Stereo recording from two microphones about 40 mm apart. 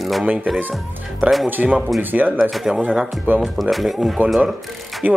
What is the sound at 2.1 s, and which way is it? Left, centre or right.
Speech, right.